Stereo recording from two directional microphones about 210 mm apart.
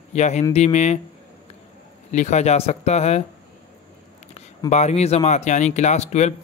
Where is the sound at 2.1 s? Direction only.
35° left (ahead or behind).